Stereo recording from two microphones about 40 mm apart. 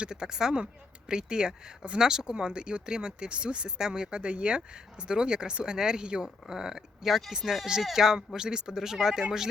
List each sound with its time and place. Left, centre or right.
0.0 s speech: centre
7.0 s speech: centre